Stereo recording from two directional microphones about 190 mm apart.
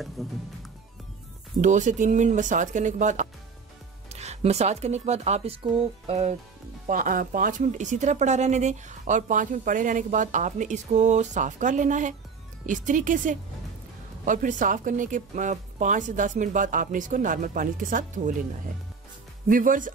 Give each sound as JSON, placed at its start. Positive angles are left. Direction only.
{"t": 0.2, "sound": "speech", "side_deg": 0}
{"t": 1.6, "sound": "speech", "side_deg": -40}
{"t": 6.0, "sound": "music", "side_deg": -35}
{"t": 6.9, "sound": "speech", "side_deg": -45}
{"t": 19.4, "sound": "speech", "side_deg": -45}